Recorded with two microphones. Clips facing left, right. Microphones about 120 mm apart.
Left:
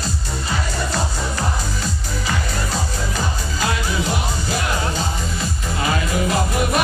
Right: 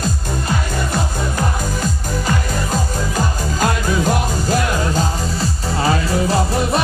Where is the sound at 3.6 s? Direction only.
45° right (ahead or behind).